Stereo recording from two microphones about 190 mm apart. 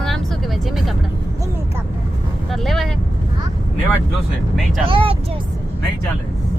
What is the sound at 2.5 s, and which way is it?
Vehicle, centre (ahead or behind).